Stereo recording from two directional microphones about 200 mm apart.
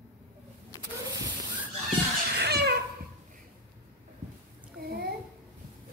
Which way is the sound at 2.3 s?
55° right (ahead or behind).